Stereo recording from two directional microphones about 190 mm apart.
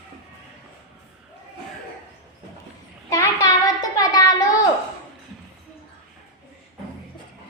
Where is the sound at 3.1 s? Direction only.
15° left (ahead or behind).